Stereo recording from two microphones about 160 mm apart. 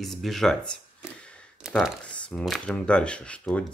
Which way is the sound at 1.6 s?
5° right (ahead or behind).